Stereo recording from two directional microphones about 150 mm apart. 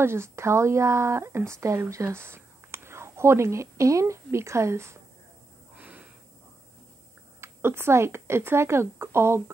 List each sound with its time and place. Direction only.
0.0 s speech: 15° right (ahead or behind)
5.8 s snort: 10° right (ahead or behind)
7.3 s speech: 15° right (ahead or behind)